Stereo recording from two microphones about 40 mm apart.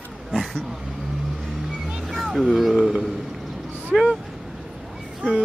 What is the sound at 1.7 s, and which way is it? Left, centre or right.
Vehicle, centre.